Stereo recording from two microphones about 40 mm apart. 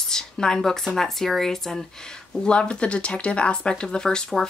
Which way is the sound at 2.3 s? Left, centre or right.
Left.